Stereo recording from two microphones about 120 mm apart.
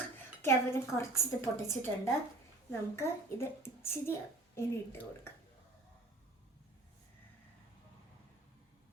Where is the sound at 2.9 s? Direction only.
20° left (ahead or behind).